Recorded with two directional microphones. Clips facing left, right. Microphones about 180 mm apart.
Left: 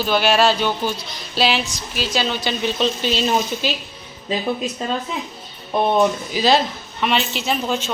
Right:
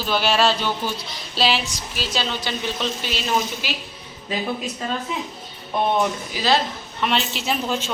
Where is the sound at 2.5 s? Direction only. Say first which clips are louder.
Left 5 dB; 20° left (ahead or behind).